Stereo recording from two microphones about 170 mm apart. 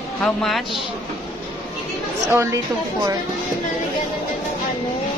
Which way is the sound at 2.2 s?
15° right (ahead or behind).